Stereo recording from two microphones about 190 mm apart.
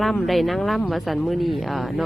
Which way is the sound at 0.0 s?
Centre (ahead or behind).